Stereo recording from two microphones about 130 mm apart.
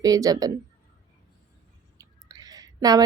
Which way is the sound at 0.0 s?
30° right (ahead or behind).